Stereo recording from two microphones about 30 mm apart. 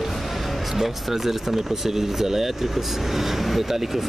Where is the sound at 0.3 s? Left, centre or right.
Centre.